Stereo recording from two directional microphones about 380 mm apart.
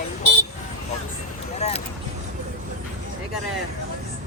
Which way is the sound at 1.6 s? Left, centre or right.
Centre.